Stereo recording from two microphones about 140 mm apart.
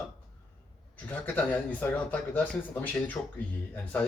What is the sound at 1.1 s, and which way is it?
Speech, 10° left (ahead or behind).